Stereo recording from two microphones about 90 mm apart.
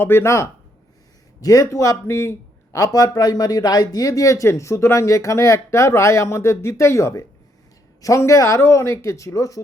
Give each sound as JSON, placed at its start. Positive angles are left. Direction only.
{"t": 0.0, "sound": "speech", "side_deg": 25}